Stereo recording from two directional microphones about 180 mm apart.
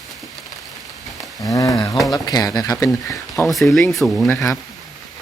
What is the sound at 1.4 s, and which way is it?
Speech, 20° left (ahead or behind).